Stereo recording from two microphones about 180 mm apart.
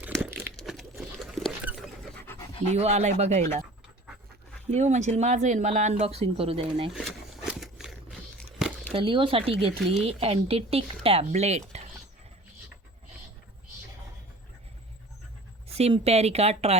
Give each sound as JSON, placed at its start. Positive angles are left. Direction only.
{"t": 0.2, "sound": "crumpling", "side_deg": -10}
{"t": 0.5, "sound": "patter", "side_deg": 0}
{"t": 2.2, "sound": "pant", "side_deg": 15}
{"t": 2.7, "sound": "speech", "side_deg": -35}
{"t": 4.7, "sound": "speech", "side_deg": -40}
{"t": 6.9, "sound": "roaring cats", "side_deg": 0}
{"t": 8.9, "sound": "speech", "side_deg": -30}
{"t": 15.6, "sound": "speech", "side_deg": -35}